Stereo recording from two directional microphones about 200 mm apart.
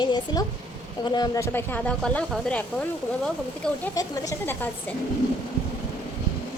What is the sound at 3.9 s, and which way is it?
Speech, 15° left (ahead or behind).